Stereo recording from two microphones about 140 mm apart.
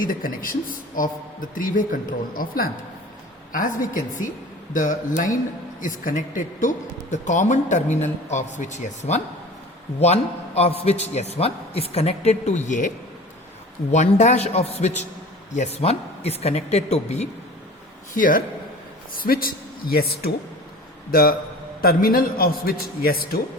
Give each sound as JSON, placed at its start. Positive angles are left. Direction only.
{"t": 0.0, "sound": "a man's voice", "side_deg": 85}
{"t": 1.5, "sound": "speech", "side_deg": 75}
{"t": 3.5, "sound": "a man's voice", "side_deg": 70}
{"t": 13.9, "sound": "a man's voice", "side_deg": 55}
{"t": 18.1, "sound": "speech", "side_deg": 80}
{"t": 19.1, "sound": "a man's voice", "side_deg": 90}